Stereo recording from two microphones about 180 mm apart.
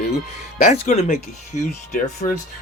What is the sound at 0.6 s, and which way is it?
Speech, 40° left (ahead or behind).